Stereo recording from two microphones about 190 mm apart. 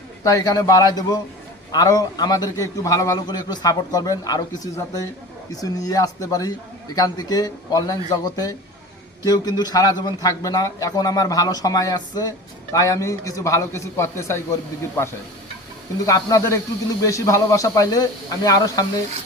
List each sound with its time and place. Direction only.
0.2 s a man's voice: 20° left (ahead or behind)